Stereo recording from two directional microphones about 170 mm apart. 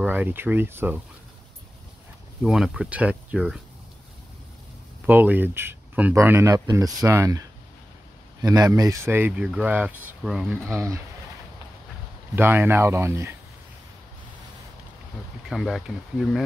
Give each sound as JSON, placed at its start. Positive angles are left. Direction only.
{"t": 0.0, "sound": "speech", "side_deg": -10}
{"t": 2.4, "sound": "speech", "side_deg": 0}
{"t": 5.0, "sound": "speech", "side_deg": -10}
{"t": 10.7, "sound": "speech", "side_deg": -15}
{"t": 12.4, "sound": "speech", "side_deg": -15}
{"t": 15.5, "sound": "speech", "side_deg": 0}